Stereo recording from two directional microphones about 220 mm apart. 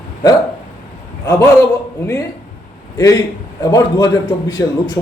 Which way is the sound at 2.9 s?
15° left (ahead or behind).